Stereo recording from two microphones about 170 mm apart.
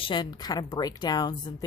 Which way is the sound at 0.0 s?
25° left (ahead or behind).